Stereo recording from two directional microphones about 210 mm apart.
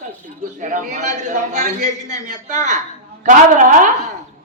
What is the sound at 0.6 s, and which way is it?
A man's voice, 35° right (ahead or behind).